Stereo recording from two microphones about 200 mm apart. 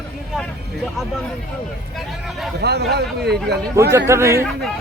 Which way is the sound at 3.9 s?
15° right (ahead or behind).